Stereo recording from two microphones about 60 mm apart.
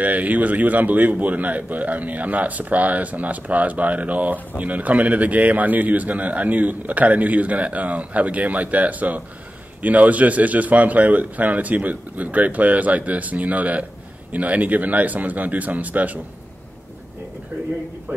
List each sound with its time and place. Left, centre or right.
0.0 s a man's voice: right